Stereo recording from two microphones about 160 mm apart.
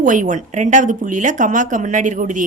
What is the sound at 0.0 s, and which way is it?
A woman's voice, 55° right (ahead or behind).